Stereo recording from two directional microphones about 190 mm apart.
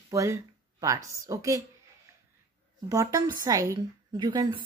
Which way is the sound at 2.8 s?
15° right (ahead or behind).